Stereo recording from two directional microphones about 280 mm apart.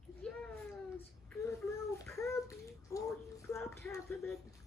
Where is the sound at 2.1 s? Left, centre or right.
Centre.